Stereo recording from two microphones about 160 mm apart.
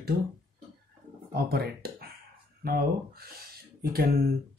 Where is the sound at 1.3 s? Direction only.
75° right (ahead or behind).